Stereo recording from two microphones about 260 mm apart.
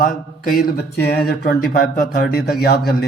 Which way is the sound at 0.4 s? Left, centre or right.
Left.